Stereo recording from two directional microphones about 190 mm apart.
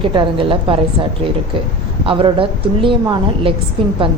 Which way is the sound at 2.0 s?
30° right (ahead or behind).